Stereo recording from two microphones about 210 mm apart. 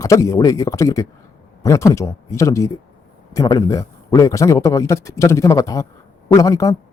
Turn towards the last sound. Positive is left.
turn(degrees=15)  # may be behind; listen again after turning